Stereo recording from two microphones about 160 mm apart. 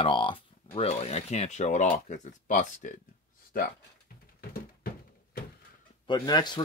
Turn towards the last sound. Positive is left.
turn(degrees=25)  # may be behind; listen again after turning